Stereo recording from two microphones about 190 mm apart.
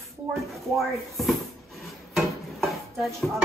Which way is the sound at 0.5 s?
Centre (ahead or behind).